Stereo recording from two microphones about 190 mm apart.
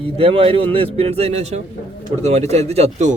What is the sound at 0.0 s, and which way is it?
A man's voice, 30° right (ahead or behind).